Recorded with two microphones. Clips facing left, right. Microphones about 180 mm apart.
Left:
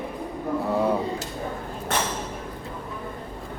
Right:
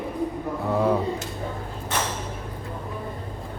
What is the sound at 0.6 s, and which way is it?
Speech, centre (ahead or behind).